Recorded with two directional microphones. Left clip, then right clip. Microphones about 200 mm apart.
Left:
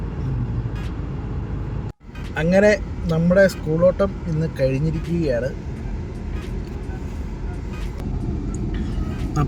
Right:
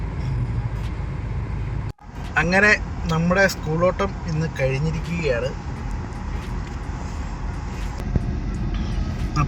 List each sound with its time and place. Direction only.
2.3 s speech: centre (ahead or behind)